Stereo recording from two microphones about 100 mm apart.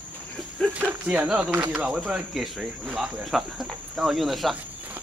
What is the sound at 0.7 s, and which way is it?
Speech, 15° right (ahead or behind).